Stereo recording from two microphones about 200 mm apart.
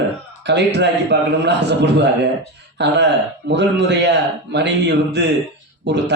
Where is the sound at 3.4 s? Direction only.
60° right (ahead or behind).